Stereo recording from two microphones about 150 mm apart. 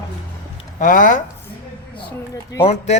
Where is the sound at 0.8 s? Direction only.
60° left (ahead or behind).